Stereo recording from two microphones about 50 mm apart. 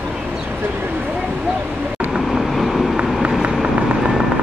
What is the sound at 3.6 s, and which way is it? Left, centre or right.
Vehicle, centre.